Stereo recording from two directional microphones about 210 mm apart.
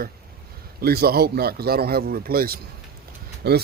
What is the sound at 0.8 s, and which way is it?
Speech, 45° right (ahead or behind).